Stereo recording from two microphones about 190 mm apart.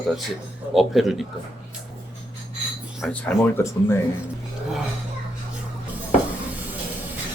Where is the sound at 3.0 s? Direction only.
10° left (ahead or behind).